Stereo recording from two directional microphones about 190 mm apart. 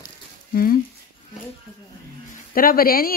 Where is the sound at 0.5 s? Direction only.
50° left (ahead or behind).